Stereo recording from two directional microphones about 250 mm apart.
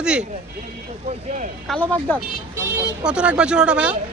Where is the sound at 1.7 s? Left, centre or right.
Centre.